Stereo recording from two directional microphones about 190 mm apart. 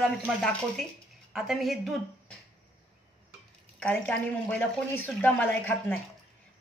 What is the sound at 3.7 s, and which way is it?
A woman's voice, 5° left (ahead or behind).